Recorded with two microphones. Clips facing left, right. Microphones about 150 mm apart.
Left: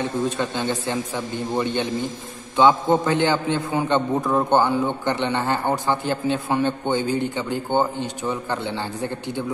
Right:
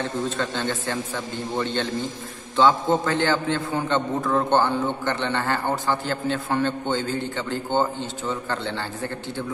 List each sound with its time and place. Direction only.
0.0 s a man's voice: 15° left (ahead or behind)